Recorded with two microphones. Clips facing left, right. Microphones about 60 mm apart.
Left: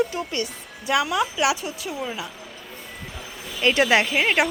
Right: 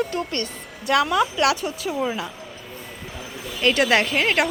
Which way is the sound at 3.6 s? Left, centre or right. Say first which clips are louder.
Even; centre.